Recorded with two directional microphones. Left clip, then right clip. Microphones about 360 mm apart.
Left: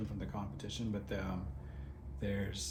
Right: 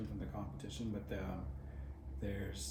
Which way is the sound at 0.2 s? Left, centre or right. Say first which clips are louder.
Left 3 dB; centre.